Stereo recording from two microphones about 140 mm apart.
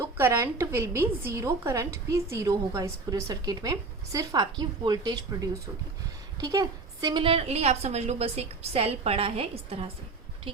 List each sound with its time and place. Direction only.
0.2 s a woman's voice: 20° right (ahead or behind); by 10.6 s 40° right (ahead or behind)